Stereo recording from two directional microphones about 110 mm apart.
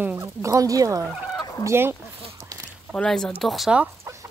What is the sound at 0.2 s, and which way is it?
Speech, 30° right (ahead or behind).